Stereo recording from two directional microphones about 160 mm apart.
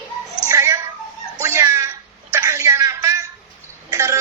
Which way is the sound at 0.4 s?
20° right (ahead or behind).